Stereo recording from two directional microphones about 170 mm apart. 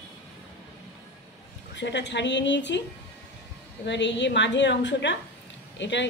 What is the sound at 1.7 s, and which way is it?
A woman's voice, 90° left.